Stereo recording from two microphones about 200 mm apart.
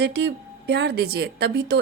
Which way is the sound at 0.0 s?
60° right (ahead or behind).